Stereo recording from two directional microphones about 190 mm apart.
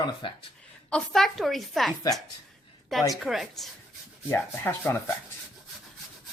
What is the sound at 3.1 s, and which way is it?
A woman's voice, centre (ahead or behind).